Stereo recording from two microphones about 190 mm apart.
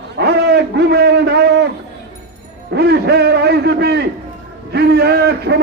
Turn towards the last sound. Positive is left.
turn(degrees=-60)  # may be behind; listen again after turning